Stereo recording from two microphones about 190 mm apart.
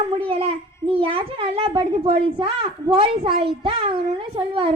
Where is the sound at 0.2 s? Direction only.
30° right (ahead or behind).